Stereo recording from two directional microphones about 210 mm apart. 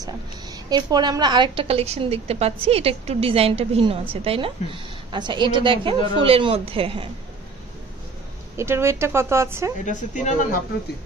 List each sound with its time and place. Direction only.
0.0 s a woman's voice: 20° right (ahead or behind)
8.5 s speech: 10° right (ahead or behind)
9.8 s speech: 35° left (ahead or behind)